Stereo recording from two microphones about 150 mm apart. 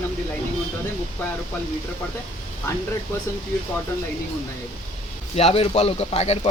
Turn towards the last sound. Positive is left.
turn(degrees=45)  # may be behind; listen again after turning